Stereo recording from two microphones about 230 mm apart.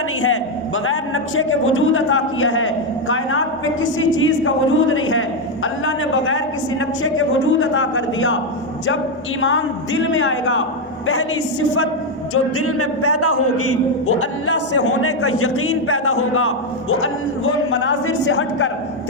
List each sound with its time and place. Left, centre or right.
0.9 s a man's voice: left
9.4 s a man's voice: left
12.3 s a man's voice: left